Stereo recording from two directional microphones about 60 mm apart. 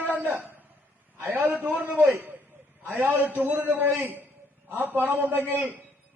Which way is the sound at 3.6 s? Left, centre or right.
Right.